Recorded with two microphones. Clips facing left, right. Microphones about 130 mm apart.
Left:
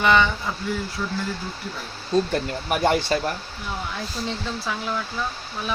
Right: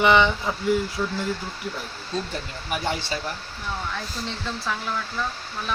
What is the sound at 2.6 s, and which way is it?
Speech, 55° left (ahead or behind).